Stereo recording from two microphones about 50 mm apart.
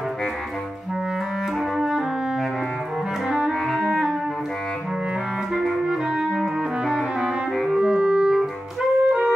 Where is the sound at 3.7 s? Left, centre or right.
Centre.